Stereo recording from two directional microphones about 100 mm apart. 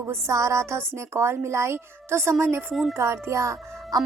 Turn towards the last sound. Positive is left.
turn(degrees=-30)  # may be behind; listen again after turning